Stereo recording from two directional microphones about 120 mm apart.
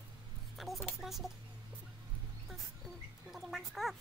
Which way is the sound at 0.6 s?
Centre (ahead or behind).